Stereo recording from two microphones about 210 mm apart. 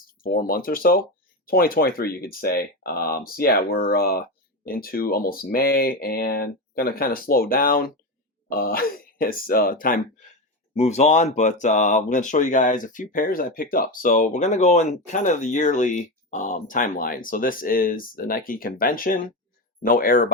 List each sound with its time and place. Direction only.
0.2 s speech: 45° left (ahead or behind)